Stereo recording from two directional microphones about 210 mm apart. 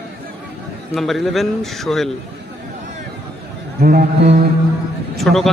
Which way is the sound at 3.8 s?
45° right (ahead or behind).